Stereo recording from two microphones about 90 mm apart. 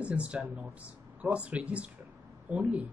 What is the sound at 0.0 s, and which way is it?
Speech, 15° right (ahead or behind).